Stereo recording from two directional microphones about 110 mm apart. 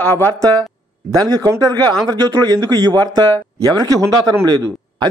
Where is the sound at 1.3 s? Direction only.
40° right (ahead or behind).